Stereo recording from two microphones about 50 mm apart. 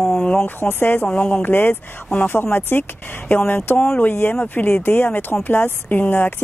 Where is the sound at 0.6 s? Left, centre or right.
Left.